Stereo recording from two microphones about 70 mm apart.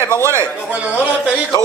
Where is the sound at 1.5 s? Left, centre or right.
Left.